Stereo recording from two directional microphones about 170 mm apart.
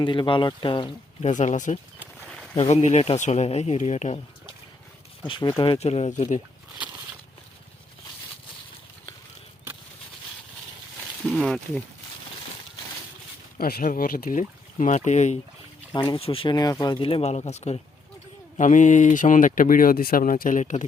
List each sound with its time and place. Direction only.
0.0 s speech: 30° left (ahead or behind)
1.3 s speech: 45° left (ahead or behind)
2.2 s a sound: 5° left (ahead or behind)
2.6 s speech: 40° left (ahead or behind)
5.2 s speech: 30° left (ahead or behind); by 6.4 s 45° left (ahead or behind)
11.3 s speech: 5° left (ahead or behind)
13.6 s speech: 60° left (ahead or behind); by 15.4 s 45° left (ahead or behind)
15.9 s speech: 30° left (ahead or behind); by 20.8 s 45° left (ahead or behind)